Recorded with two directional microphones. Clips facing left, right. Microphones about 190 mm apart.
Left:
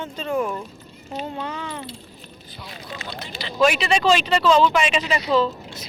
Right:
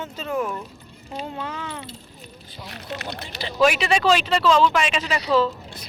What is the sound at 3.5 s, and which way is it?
Speech, 10° right (ahead or behind).